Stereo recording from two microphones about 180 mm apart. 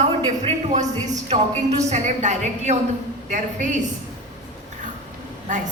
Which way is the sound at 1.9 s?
40° right (ahead or behind).